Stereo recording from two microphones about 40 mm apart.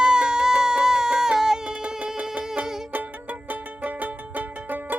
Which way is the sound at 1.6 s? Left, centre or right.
Right.